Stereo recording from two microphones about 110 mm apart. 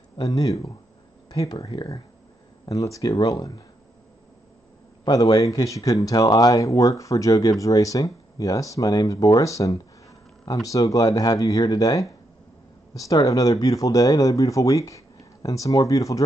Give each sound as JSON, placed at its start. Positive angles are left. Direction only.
{"t": 0.2, "sound": "speech", "side_deg": 30}
{"t": 5.0, "sound": "speech", "side_deg": 35}